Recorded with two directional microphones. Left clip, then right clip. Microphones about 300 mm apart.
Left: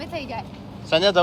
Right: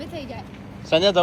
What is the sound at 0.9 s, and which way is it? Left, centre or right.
Speech, centre.